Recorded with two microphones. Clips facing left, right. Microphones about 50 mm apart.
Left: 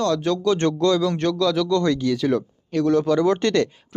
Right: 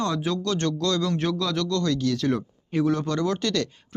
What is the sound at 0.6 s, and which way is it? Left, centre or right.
Speech, left.